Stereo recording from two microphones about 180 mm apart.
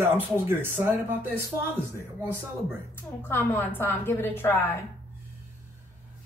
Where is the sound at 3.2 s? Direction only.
10° left (ahead or behind).